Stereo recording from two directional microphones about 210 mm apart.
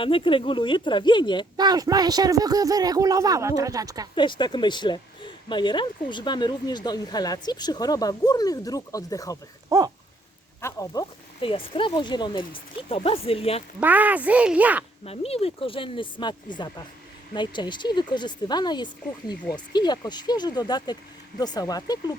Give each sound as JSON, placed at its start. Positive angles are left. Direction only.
{"t": 0.0, "sound": "speech", "side_deg": 25}
{"t": 1.5, "sound": "speech", "side_deg": -20}
{"t": 4.1, "sound": "speech", "side_deg": 20}
{"t": 9.6, "sound": "dog", "side_deg": -15}
{"t": 10.6, "sound": "speech", "side_deg": 15}
{"t": 13.7, "sound": "speech", "side_deg": -10}
{"t": 15.0, "sound": "speech", "side_deg": 30}